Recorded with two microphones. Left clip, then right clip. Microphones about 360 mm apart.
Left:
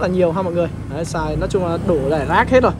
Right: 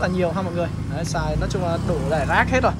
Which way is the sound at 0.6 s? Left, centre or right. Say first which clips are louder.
Left 6 dB; centre.